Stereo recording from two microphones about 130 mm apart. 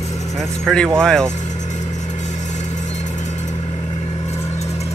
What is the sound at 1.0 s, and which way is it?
Speech, 5° left (ahead or behind).